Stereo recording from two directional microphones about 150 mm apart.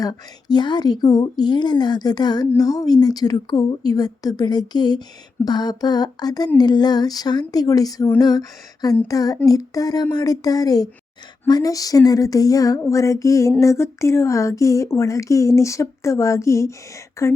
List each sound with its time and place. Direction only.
0.0 s speech: 25° left (ahead or behind)